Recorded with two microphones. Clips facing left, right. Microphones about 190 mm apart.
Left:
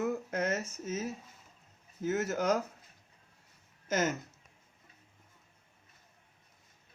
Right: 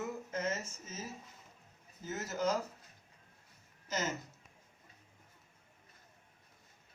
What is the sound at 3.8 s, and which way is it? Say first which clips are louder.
Speech: left 7 dB; 60° left (ahead or behind).